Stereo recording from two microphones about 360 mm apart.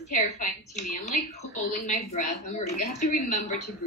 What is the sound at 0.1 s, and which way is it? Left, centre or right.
A woman's voice, left.